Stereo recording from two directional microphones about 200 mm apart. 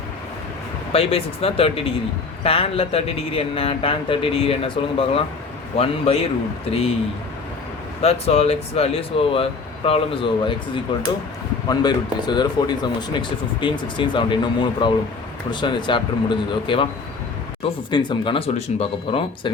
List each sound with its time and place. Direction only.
0.9 s speech: 30° left (ahead or behind)
8.0 s speech: 30° left (ahead or behind)
11.7 s speech: 20° left (ahead or behind)